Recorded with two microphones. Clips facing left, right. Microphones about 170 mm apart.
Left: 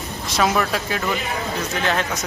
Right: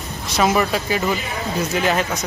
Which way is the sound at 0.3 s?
Centre (ahead or behind).